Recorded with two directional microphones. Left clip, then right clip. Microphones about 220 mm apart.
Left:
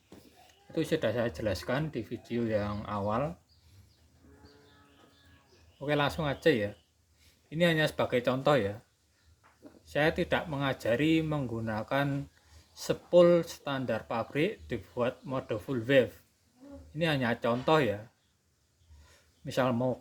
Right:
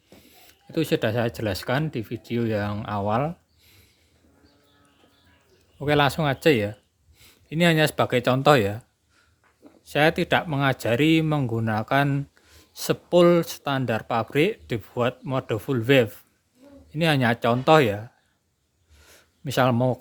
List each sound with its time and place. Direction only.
0.7 s speech: 50° right (ahead or behind)
5.8 s speech: 50° right (ahead or behind)
9.8 s speech: 50° right (ahead or behind)
19.0 s a sound: 50° right (ahead or behind)